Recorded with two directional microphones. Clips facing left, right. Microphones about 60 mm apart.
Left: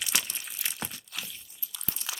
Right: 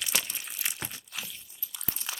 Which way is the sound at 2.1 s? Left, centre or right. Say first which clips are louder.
Even; right.